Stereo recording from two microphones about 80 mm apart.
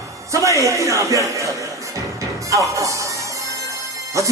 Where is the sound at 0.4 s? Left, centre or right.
Right.